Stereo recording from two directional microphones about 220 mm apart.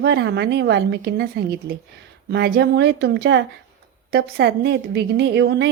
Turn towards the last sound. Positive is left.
turn(degrees=-50)  # may be behind; listen again after turning